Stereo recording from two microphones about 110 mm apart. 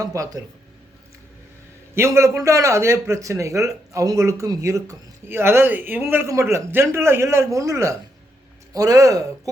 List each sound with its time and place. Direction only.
0.0 s speech: 30° right (ahead or behind)
2.0 s a man's voice: 25° right (ahead or behind)